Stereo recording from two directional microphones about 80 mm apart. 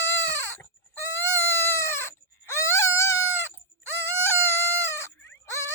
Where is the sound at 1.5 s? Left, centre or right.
Left.